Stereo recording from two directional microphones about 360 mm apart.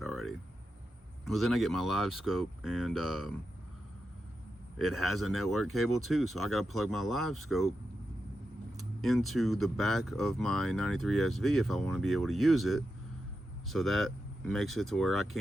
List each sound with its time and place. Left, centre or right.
0.0 s a sound: centre
1.2 s speech: centre
4.8 s speech: centre
9.0 s speech: centre